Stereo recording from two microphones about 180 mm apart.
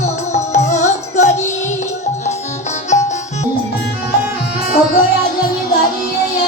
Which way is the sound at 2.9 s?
40° left (ahead or behind).